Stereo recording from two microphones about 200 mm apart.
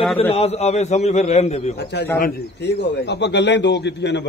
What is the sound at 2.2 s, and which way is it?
Speech, 55° left (ahead or behind).